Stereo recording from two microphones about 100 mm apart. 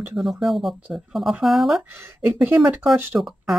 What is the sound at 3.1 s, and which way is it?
Speech, centre (ahead or behind).